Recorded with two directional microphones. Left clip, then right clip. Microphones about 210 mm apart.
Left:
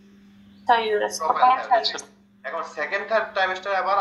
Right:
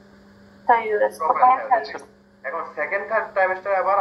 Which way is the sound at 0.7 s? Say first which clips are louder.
Right 2 dB; 35° left (ahead or behind).